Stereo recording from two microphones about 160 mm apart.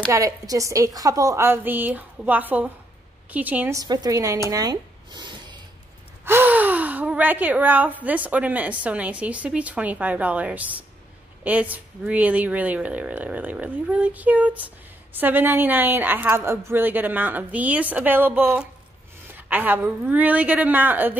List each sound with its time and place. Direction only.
0.0 s a woman's voice: 20° right (ahead or behind)
3.8 s a woman's voice: 25° right (ahead or behind)
4.5 s a sound: 25° right (ahead or behind)
6.2 s speech: 10° right (ahead or behind)